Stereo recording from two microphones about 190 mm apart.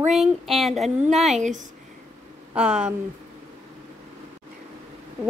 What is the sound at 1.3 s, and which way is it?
Speech, 40° right (ahead or behind).